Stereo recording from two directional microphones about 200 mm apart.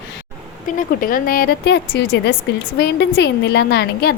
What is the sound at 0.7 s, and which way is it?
A woman's voice, 45° left (ahead or behind).